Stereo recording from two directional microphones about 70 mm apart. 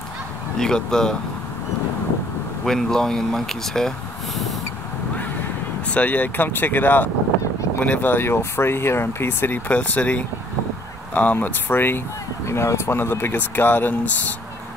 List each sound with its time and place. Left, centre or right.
0.6 s speech: centre
2.6 s speech: centre
5.9 s speech: left
11.3 s speech: left
12.4 s speech: left